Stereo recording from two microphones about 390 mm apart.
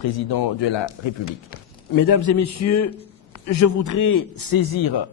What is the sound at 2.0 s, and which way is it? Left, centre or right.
A man's voice, left.